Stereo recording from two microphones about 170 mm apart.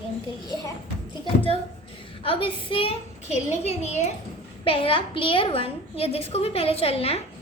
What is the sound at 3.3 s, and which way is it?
A woman's voice, 40° left (ahead or behind).